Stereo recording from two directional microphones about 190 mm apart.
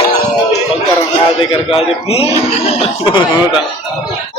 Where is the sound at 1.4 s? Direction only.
30° left (ahead or behind).